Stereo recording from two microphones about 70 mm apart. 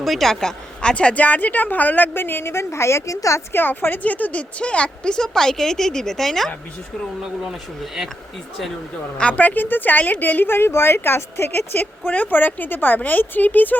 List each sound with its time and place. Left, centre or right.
0.0 s a woman's voice: centre
0.8 s a woman's voice: centre; by 3.4 s left
3.5 s a woman's voice: left; by 8.1 s centre
9.1 s a woman's voice: centre